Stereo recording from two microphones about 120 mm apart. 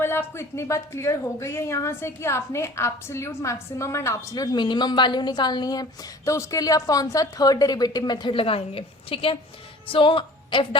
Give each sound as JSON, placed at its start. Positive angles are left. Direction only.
{"t": 0.0, "sound": "a woman's voice", "side_deg": 20}